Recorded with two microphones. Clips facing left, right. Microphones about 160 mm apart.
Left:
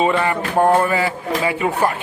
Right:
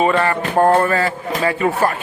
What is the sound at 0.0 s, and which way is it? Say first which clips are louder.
Speech: right 1 dB; 15° left (ahead or behind).